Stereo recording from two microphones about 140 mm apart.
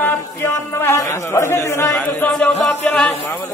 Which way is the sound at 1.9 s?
5° left (ahead or behind).